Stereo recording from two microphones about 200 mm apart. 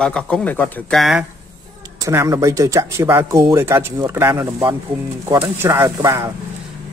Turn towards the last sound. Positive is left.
turn(degrees=-15)  # may be behind; listen again after turning